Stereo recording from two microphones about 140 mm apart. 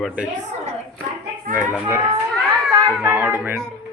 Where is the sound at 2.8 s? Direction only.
5° right (ahead or behind).